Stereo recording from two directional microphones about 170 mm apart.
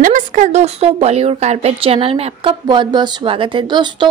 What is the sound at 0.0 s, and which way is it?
A woman's voice, 50° right (ahead or behind).